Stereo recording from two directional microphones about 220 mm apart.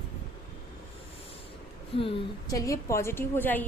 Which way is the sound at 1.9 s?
25° left (ahead or behind).